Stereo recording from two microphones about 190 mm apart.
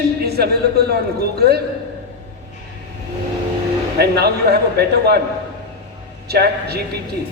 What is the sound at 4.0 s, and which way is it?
A man's voice, 55° right (ahead or behind).